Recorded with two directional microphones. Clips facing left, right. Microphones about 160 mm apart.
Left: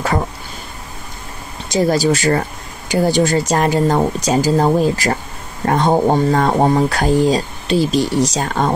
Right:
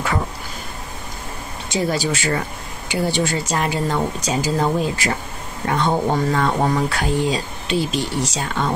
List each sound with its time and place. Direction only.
1.7 s speech: 40° left (ahead or behind)